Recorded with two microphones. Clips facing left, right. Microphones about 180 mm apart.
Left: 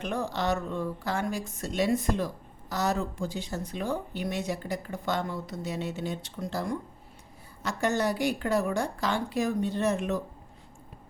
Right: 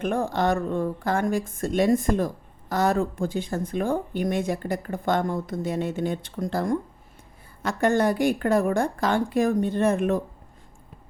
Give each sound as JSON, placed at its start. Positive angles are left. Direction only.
{"t": 0.0, "sound": "speech", "side_deg": -50}